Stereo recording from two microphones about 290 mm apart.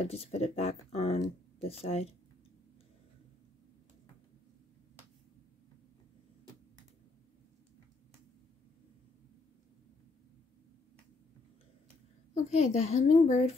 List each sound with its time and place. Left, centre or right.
0.0 s speech: left
12.4 s speech: left